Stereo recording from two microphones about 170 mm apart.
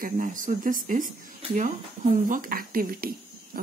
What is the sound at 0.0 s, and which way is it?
Speech, 50° right (ahead or behind).